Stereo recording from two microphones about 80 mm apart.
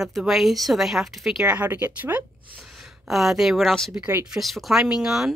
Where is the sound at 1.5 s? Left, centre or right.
Centre.